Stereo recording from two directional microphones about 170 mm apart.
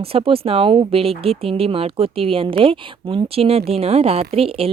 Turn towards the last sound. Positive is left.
turn(degrees=-35)  # may be behind; listen again after turning